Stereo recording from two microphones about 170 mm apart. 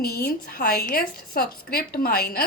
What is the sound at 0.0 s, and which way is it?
A woman's voice, 65° left (ahead or behind).